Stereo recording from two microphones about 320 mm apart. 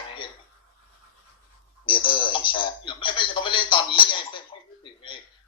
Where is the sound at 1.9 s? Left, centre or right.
Centre.